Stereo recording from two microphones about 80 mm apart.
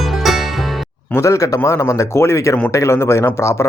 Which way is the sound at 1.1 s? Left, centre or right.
Left.